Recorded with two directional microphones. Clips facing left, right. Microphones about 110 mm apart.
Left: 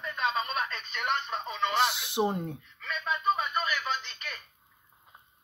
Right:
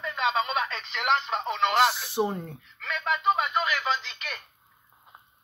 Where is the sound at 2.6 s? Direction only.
85° right.